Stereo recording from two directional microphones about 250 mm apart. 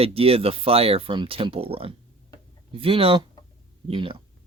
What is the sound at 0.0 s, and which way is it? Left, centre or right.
Speech, right.